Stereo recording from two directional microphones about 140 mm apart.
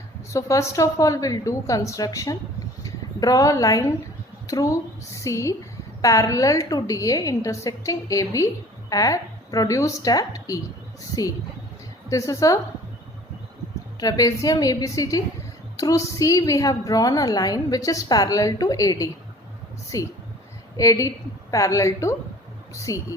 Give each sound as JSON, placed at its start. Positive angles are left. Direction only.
{"t": 0.3, "sound": "a woman's voice", "side_deg": 20}
{"t": 12.0, "sound": "a woman's voice", "side_deg": 20}
{"t": 14.0, "sound": "a woman's voice", "side_deg": 25}